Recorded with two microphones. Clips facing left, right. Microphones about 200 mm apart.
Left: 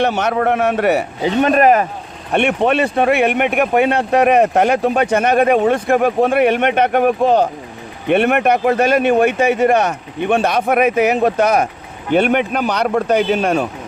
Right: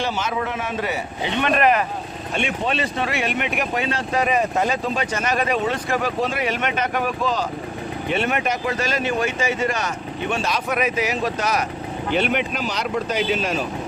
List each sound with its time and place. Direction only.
0.0 s speech: 65° left (ahead or behind)
1.2 s speech: 40° left (ahead or behind)
2.3 s speech: 60° left (ahead or behind)